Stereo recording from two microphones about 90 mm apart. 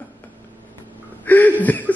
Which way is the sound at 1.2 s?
20° left (ahead or behind).